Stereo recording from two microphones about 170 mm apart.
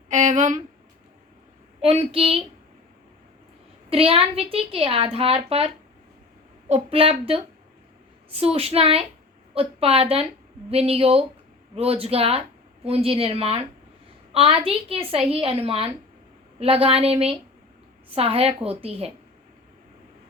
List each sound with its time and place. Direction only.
0.1 s a sound: 45° right (ahead or behind)
1.8 s a woman's voice: 35° right (ahead or behind)
3.8 s a woman's voice: 35° right (ahead or behind)